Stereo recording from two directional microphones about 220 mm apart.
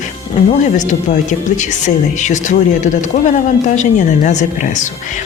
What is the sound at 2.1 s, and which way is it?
A woman's voice, 35° left (ahead or behind).